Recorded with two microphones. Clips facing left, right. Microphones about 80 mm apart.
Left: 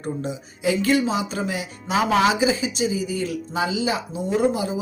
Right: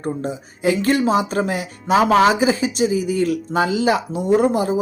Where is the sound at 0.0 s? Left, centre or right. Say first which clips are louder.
Right 4 dB; right.